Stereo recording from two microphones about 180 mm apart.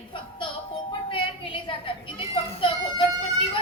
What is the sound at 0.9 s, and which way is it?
Children playing, 30° left (ahead or behind).